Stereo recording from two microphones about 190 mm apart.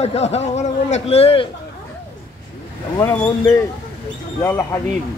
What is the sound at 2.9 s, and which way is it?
Speech, 15° left (ahead or behind).